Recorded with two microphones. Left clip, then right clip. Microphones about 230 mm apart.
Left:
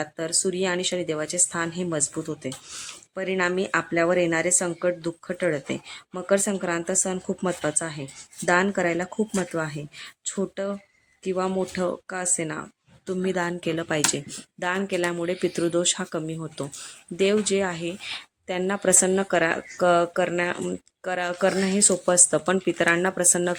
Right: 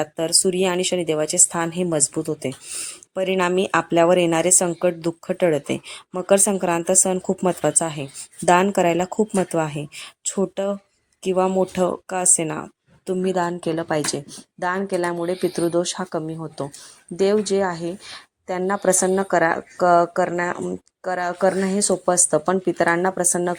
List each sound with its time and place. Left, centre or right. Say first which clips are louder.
0.0 s a woman's voice: right 6 dB; centre